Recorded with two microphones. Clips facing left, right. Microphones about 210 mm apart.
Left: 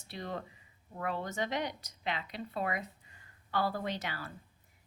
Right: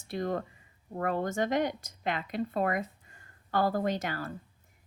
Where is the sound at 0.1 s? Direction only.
50° right (ahead or behind).